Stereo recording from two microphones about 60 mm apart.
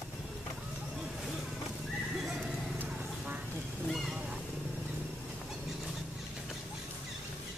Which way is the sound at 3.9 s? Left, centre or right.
Centre.